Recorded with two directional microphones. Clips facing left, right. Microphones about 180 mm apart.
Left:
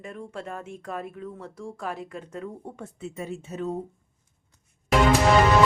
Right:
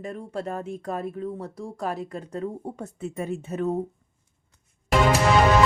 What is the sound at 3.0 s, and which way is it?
Speech, 55° right (ahead or behind).